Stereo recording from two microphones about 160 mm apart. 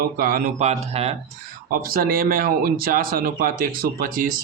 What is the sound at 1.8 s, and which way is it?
Speech, 65° right (ahead or behind).